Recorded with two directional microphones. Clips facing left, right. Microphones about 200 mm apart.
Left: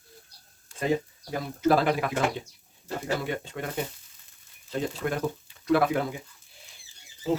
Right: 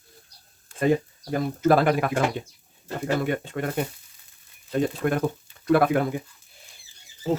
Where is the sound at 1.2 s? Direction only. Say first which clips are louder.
Right 3 dB; 50° right (ahead or behind).